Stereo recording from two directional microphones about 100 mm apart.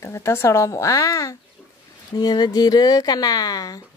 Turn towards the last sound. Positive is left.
turn(degrees=40)  # may be behind; listen again after turning